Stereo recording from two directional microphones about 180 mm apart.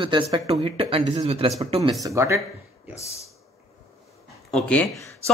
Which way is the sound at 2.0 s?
15° right (ahead or behind).